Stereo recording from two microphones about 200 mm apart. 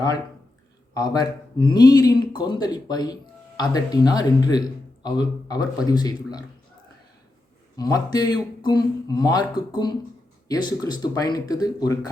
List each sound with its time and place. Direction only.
0.9 s a man's voice: 20° left (ahead or behind)
7.8 s speech: 20° left (ahead or behind)